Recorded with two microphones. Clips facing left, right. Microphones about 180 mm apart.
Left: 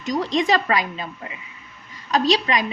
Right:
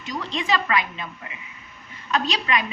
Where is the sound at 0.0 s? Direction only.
40° left (ahead or behind).